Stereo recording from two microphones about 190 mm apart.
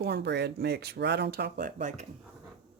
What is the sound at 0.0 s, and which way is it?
Speech, 60° right (ahead or behind).